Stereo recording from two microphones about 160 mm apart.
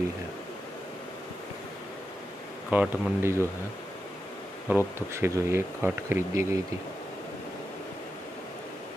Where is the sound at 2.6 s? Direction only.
15° right (ahead or behind).